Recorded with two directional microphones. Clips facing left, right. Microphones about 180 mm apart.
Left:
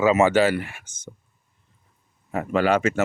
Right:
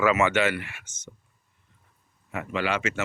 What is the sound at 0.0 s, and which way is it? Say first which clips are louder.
Speech: left 5 dB; 30° left (ahead or behind).